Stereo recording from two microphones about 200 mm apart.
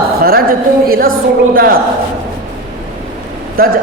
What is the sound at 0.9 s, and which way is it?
Speech, 45° right (ahead or behind).